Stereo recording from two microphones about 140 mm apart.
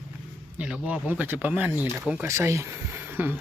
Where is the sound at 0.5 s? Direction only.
10° right (ahead or behind).